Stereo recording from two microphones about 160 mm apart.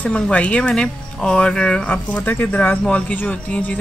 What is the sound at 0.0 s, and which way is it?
Speech, 10° left (ahead or behind).